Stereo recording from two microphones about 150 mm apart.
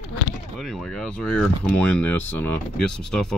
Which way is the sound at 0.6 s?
Centre (ahead or behind).